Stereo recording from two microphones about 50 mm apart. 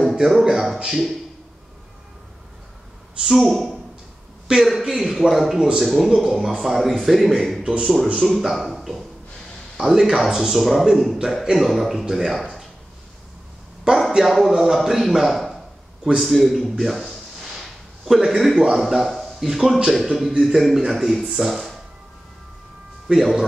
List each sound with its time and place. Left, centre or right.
0.1 s a sound: centre
0.8 s a man's voice: centre
3.3 s a man's voice: centre
7.6 s speech: centre
8.3 s a man's voice: centre
13.9 s a man's voice: centre
14.2 s a man's voice: centre
23.1 s a man's voice: centre